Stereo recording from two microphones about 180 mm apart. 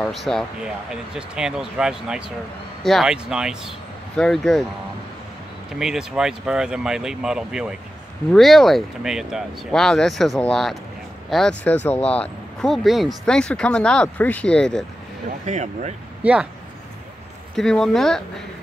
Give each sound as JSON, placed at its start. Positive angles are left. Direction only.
{"t": 0.0, "sound": "speech", "side_deg": 0}
{"t": 5.8, "sound": "speech", "side_deg": -5}
{"t": 15.4, "sound": "speech", "side_deg": -40}
{"t": 16.2, "sound": "speech", "side_deg": -5}
{"t": 17.6, "sound": "speech", "side_deg": 0}